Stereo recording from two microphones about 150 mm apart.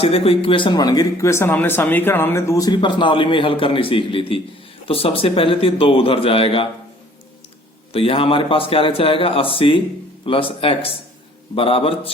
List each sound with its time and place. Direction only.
0.0 s speech: 40° left (ahead or behind)
7.9 s speech: 40° left (ahead or behind)